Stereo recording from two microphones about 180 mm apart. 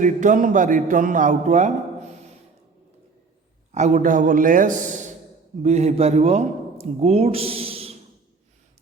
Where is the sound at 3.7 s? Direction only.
40° right (ahead or behind).